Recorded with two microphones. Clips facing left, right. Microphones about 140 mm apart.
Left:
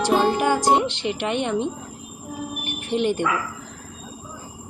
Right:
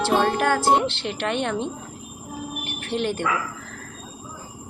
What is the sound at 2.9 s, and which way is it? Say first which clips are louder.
Speech: left 3 dB; 15° left (ahead or behind).